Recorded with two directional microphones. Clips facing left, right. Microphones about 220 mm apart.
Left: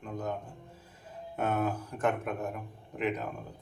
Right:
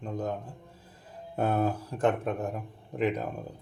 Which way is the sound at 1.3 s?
35° right (ahead or behind).